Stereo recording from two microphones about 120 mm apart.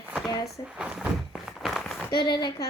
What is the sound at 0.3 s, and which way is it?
Speech, 30° left (ahead or behind).